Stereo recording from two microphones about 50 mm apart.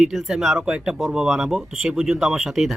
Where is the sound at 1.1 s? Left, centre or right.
Centre.